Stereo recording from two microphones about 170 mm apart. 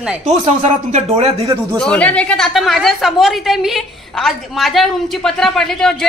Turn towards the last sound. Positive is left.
turn(degrees=5)  # may be behind; listen again after turning